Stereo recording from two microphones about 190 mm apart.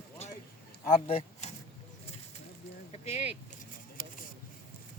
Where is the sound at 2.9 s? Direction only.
35° left (ahead or behind).